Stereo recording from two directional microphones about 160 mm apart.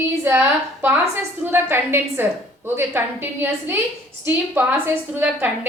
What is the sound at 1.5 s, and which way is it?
A woman's voice, 15° right (ahead or behind).